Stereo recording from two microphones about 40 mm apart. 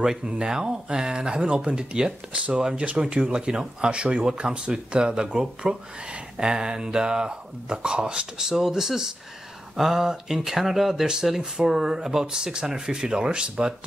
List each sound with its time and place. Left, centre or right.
0.0 s speech: centre